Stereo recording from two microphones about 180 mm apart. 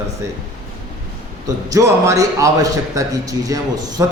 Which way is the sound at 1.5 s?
15° right (ahead or behind).